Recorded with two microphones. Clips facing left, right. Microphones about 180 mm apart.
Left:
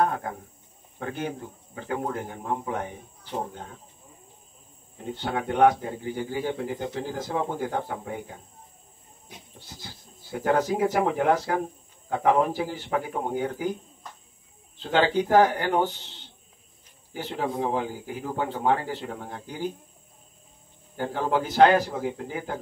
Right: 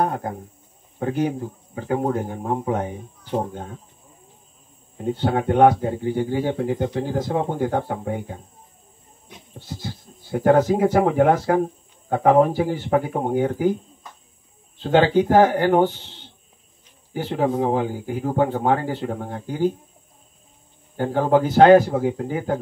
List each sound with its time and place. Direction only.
0.0 s a man's voice: 35° right (ahead or behind)
5.3 s speech: 45° right (ahead or behind)
6.0 s speech: 30° right (ahead or behind)
6.7 s speech: 45° right (ahead or behind)
9.7 s speech: 45° right (ahead or behind)
14.8 s speech: 45° right (ahead or behind)
17.1 s speech: 45° right (ahead or behind)
21.0 s speech: 45° right (ahead or behind)